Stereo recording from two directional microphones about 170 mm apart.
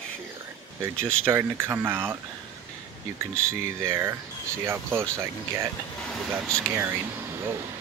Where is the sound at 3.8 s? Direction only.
15° right (ahead or behind).